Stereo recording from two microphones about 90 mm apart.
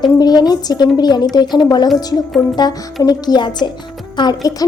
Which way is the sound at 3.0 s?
50° left (ahead or behind).